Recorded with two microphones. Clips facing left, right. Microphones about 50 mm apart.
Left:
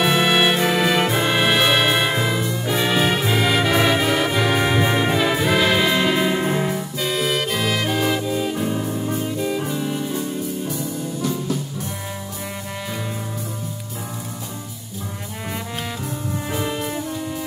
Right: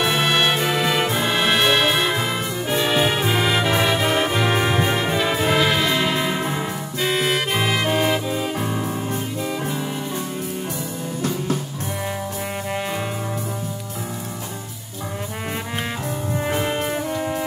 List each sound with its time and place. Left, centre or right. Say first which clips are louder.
0.0 s music: left 2 dB; centre
3.2 s brass instrument: left 1 dB; centre
3.7 s music: left 2 dB; centre
4.0 s music: even; right
4.4 s music: left 1 dB; centre
4.8 s brass instrument: left 2 dB; centre
5.1 s music: left 1 dB; centre
7.0 s music: right 2 dB; right
16.4 s music: right 3 dB; right